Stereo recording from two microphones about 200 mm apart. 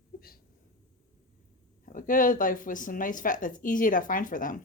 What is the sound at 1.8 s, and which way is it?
Speech, 40° left (ahead or behind).